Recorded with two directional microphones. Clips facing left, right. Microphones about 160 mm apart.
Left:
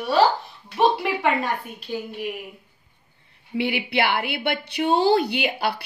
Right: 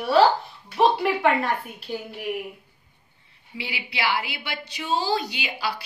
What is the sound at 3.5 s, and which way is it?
A woman's voice, 60° left (ahead or behind).